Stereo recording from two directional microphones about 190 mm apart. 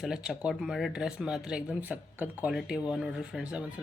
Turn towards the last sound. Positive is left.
turn(degrees=-5)  # may be behind; listen again after turning